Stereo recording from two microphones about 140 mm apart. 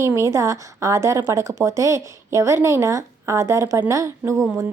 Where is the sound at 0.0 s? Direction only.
20° right (ahead or behind).